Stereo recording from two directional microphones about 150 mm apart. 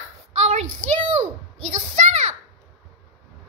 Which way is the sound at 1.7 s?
55° right (ahead or behind).